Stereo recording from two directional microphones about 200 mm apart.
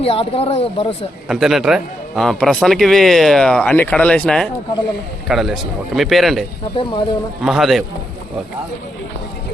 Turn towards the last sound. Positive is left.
turn(degrees=0)  # may be behind; listen again after turning